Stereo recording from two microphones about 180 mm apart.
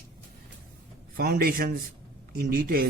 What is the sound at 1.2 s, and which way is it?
A man's voice, 55° right (ahead or behind).